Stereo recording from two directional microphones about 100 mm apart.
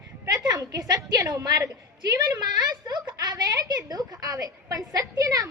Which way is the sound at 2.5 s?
50° right (ahead or behind).